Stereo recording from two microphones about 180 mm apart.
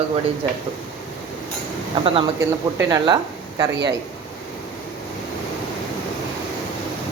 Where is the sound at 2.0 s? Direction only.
30° right (ahead or behind).